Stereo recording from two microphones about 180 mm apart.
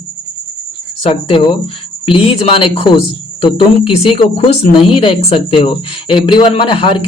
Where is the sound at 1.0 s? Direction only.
30° left (ahead or behind).